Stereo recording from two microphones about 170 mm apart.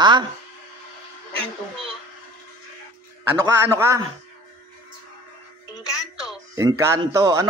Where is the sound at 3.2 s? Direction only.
15° right (ahead or behind).